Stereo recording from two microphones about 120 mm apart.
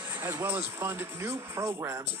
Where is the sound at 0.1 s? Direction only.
20° right (ahead or behind).